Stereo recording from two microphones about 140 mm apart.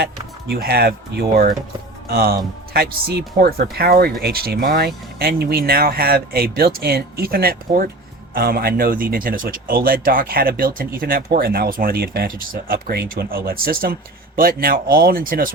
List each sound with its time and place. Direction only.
0.5 s a man's voice: 90° right